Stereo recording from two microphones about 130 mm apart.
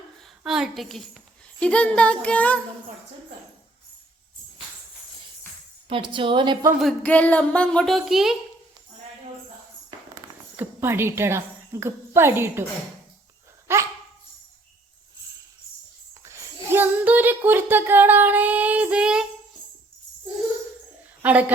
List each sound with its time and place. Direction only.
0.2 s a sound: 5° right (ahead or behind)
0.8 s speech: centre (ahead or behind)
5.9 s a woman's voice: 40° right (ahead or behind)
7.0 s speech: 10° left (ahead or behind)
10.6 s a woman's voice: 20° right (ahead or behind)
13.7 s dog: 20° right (ahead or behind)
16.2 s a sound: 20° right (ahead or behind)
21.2 s a woman's voice: 10° right (ahead or behind)